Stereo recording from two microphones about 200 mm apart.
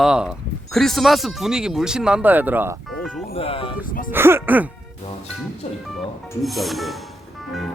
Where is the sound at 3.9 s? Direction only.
45° left (ahead or behind).